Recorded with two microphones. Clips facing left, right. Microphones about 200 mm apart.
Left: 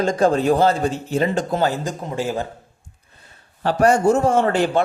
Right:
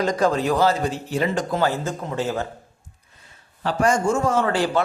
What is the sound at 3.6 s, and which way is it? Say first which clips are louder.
Speech: left 4 dB; 60° left (ahead or behind).